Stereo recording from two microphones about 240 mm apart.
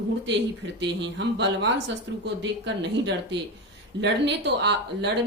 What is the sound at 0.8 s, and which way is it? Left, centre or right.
Speech, right.